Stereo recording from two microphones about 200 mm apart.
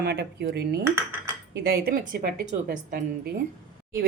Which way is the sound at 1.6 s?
50° right (ahead or behind).